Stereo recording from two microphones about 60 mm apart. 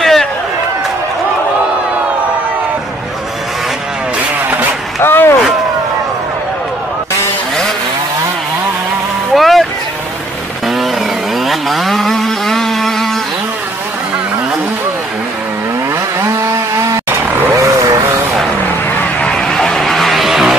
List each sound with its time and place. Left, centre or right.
0.0 s a sound: centre
5.0 s vehicle: left
9.3 s vehicle: centre
11.4 s vehicle: centre
16.2 s a sound: right
19.2 s vehicle: centre